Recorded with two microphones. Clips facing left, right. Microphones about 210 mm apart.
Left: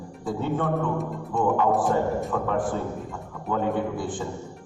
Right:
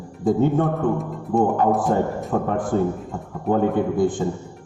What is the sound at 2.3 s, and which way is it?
A man's voice, 40° right (ahead or behind).